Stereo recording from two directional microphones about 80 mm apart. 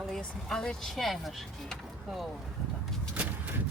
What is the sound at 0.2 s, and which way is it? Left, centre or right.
Speech, centre.